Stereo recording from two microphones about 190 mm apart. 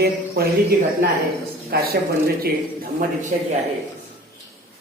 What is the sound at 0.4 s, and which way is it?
Speech, 55° right (ahead or behind).